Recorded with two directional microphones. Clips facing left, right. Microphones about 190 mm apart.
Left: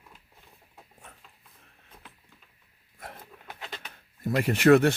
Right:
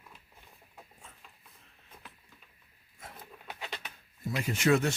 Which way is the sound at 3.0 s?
60° left (ahead or behind).